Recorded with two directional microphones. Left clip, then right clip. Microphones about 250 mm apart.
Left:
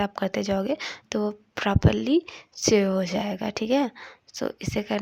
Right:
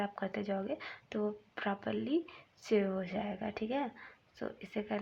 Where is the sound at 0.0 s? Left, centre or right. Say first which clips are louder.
Left 11 dB; left.